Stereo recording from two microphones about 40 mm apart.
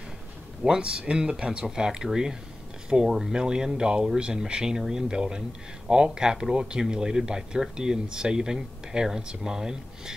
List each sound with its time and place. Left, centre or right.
0.7 s speech: right